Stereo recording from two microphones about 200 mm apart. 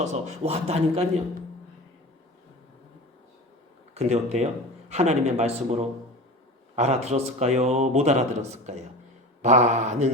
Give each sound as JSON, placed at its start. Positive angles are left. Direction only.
{"t": 0.0, "sound": "a man's voice", "side_deg": -35}
{"t": 3.9, "sound": "a man's voice", "side_deg": -30}